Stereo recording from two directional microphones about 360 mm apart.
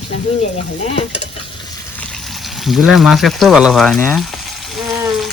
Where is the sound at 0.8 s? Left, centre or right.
Centre.